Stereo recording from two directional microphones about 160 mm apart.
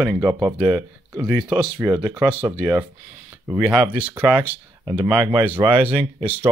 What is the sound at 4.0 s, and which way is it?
Speech, 10° right (ahead or behind).